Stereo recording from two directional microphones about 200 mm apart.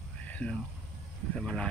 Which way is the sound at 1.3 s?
5° left (ahead or behind).